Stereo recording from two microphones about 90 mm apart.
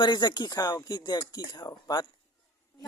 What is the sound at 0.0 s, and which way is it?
Speech, 55° left (ahead or behind).